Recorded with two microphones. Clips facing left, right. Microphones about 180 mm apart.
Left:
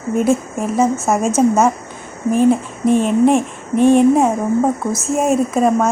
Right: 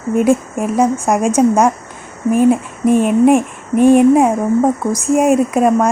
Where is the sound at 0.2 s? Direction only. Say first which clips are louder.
Right 3 dB; 10° right (ahead or behind).